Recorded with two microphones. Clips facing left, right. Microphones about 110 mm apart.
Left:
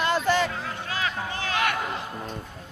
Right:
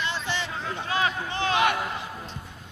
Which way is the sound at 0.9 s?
25° right (ahead or behind).